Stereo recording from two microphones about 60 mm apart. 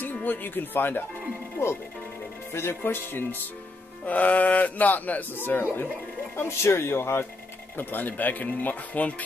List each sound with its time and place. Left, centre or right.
0.0 s speech: left
2.5 s speech: left
4.0 s speech: left
7.7 s speech: left